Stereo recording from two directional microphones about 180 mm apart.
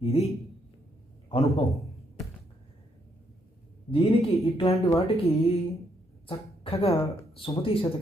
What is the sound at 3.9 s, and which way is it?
Speech, 30° left (ahead or behind).